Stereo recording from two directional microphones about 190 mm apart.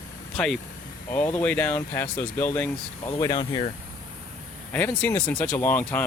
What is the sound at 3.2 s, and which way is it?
Speech, 20° left (ahead or behind).